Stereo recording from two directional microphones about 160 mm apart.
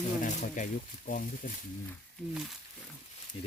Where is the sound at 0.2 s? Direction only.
50° left (ahead or behind).